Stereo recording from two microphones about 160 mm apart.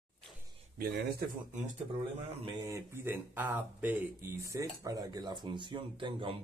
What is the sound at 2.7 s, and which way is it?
Speech, 15° right (ahead or behind).